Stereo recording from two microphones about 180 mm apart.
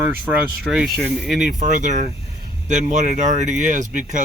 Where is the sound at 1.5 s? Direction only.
45° right (ahead or behind).